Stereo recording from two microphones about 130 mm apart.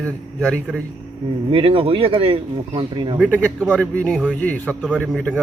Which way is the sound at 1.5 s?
45° right (ahead or behind).